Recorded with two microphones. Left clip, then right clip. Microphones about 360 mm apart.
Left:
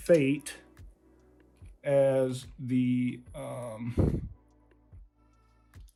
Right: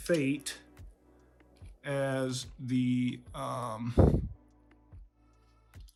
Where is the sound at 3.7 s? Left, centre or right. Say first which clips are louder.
Right 6 dB; right.